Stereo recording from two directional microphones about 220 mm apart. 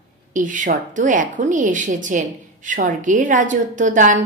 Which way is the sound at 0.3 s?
35° right (ahead or behind).